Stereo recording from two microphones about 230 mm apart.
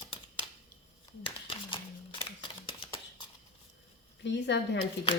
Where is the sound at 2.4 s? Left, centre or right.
Left.